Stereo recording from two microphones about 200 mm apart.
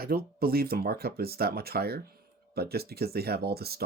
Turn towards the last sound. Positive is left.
turn(degrees=-50)  # may be behind; listen again after turning